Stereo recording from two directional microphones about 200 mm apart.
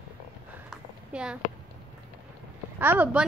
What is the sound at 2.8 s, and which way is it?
Speech, 10° right (ahead or behind).